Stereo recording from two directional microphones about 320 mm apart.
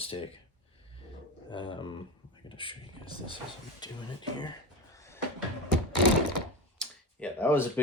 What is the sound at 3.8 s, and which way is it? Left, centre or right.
Speech, centre.